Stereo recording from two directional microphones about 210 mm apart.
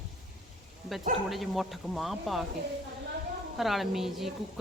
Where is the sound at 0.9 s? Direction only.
Centre (ahead or behind).